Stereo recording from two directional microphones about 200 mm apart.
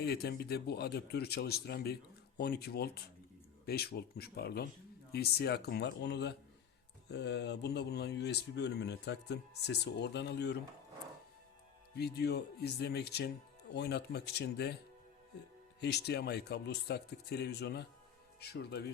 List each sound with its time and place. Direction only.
0.0 s speech: 55° left (ahead or behind)
11.9 s speech: 55° left (ahead or behind)
15.8 s speech: 55° left (ahead or behind)